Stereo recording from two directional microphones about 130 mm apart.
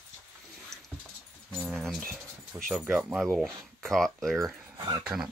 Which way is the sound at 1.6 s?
Centre (ahead or behind).